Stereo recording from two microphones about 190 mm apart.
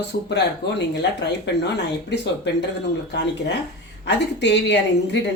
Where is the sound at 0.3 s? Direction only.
60° left (ahead or behind).